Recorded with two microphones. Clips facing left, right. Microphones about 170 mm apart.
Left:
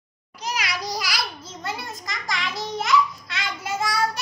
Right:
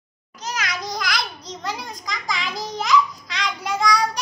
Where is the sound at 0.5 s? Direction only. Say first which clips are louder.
Even; 10° left (ahead or behind).